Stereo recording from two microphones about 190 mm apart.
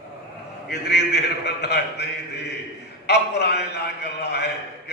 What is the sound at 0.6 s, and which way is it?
A man's voice, 60° left (ahead or behind).